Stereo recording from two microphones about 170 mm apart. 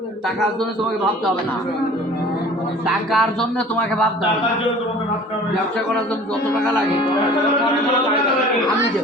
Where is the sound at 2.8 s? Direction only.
Centre (ahead or behind).